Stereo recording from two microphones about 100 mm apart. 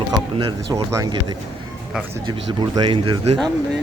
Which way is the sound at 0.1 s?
40° right (ahead or behind).